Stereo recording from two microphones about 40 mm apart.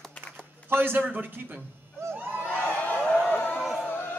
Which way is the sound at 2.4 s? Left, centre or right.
Left.